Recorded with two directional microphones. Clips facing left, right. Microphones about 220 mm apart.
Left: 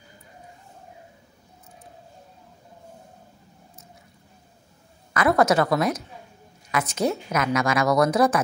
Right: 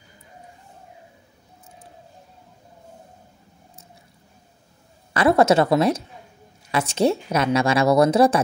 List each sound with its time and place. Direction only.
5.1 s a woman's voice: 30° right (ahead or behind)